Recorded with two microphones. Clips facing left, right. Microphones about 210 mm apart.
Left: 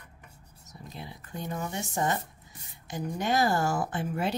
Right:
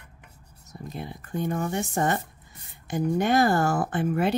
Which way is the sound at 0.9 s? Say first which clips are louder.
Right 8 dB; 50° right (ahead or behind).